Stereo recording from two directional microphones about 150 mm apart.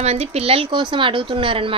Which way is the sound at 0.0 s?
45° right (ahead or behind).